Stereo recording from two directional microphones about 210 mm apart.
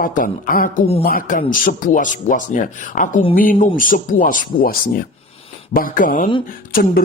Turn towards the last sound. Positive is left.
turn(degrees=45)  # may be behind; listen again after turning